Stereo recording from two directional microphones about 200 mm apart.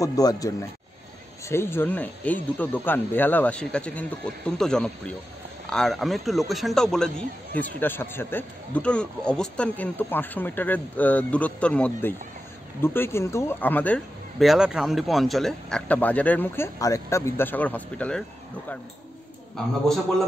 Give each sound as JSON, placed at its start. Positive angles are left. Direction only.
{"t": 0.0, "sound": "a man's voice", "side_deg": 20}